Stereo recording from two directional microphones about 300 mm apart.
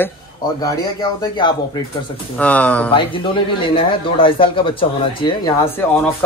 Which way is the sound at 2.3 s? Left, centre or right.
Centre.